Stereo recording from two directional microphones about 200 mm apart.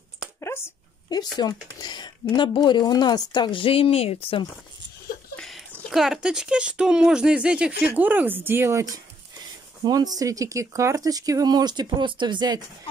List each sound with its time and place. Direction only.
0.4 s a sound: 15° left (ahead or behind)
1.8 s speech: 20° left (ahead or behind)
5.3 s speech: 5° left (ahead or behind); by 12.6 s 20° right (ahead or behind)